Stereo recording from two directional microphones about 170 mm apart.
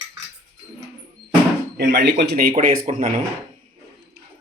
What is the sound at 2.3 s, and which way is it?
Speech, 55° right (ahead or behind).